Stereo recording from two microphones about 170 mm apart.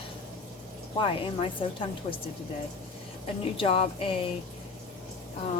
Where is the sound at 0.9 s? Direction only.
30° left (ahead or behind).